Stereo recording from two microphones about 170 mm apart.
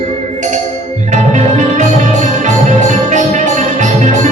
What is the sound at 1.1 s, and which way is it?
Music, 45° right (ahead or behind).